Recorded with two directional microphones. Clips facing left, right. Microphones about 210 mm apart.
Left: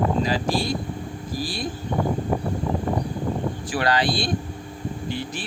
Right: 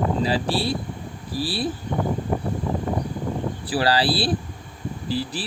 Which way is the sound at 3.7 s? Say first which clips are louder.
Right 2 dB; 35° right (ahead or behind).